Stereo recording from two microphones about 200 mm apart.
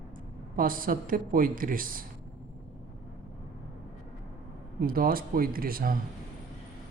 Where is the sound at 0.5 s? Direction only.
45° right (ahead or behind).